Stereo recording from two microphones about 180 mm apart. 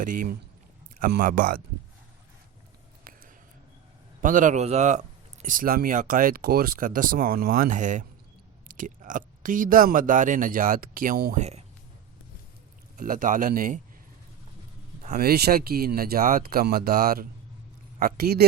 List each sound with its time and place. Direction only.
0.0 s speech: 50° right (ahead or behind)
3.0 s a sound: 50° right (ahead or behind)
4.2 s speech: 45° right (ahead or behind)
13.0 s speech: 50° right (ahead or behind)
15.2 s speech: 60° right (ahead or behind)